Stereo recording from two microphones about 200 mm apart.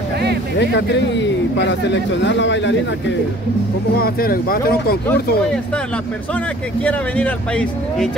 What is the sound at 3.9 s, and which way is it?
Speech, 50° left (ahead or behind).